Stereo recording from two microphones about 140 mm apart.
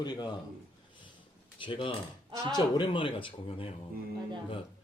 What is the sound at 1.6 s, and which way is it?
A man's voice, 35° left (ahead or behind).